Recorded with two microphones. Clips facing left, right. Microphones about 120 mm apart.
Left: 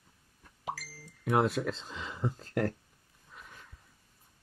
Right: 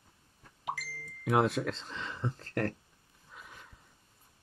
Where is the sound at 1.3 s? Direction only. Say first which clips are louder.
Even; centre (ahead or behind).